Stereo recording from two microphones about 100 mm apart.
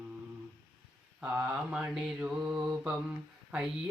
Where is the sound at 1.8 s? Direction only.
10° right (ahead or behind).